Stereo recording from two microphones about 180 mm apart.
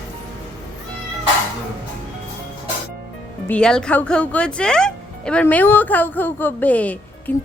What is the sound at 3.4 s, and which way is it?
Speech, 5° left (ahead or behind).